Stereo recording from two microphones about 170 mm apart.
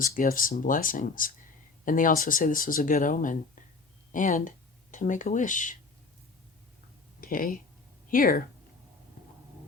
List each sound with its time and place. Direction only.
0.0 s speech: 55° left (ahead or behind)
7.2 s speech: 55° left (ahead or behind)